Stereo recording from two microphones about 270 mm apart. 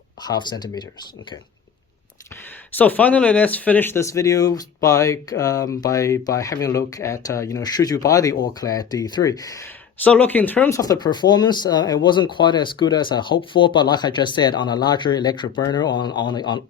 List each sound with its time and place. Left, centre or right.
0.2 s speech: centre
2.7 s speech: centre